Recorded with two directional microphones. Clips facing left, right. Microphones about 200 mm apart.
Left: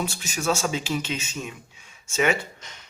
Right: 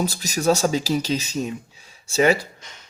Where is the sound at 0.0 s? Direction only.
40° right (ahead or behind).